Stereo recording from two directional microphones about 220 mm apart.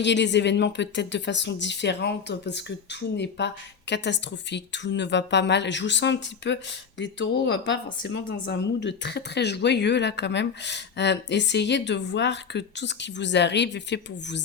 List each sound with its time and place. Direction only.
0.0 s speech: 50° left (ahead or behind)